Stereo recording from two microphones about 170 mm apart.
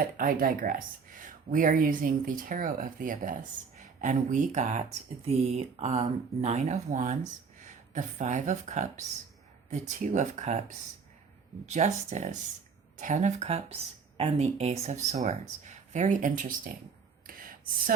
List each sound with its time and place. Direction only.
0.0 s speech: 55° right (ahead or behind)
11.6 s speech: 45° right (ahead or behind)
17.2 s a sound: 55° right (ahead or behind)